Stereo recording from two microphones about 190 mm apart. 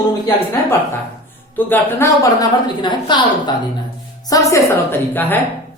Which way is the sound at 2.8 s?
25° left (ahead or behind).